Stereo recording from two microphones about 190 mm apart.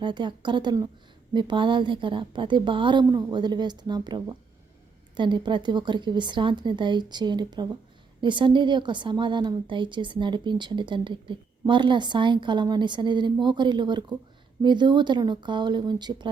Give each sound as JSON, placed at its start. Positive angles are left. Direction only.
{"t": 0.0, "sound": "a woman's voice", "side_deg": -25}